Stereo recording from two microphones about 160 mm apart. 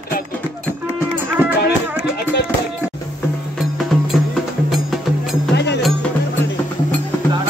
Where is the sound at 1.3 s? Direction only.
10° right (ahead or behind).